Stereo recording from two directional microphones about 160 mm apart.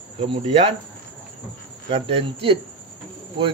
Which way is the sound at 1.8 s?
40° right (ahead or behind).